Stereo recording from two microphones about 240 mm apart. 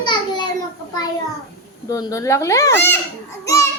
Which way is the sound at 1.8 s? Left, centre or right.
Centre.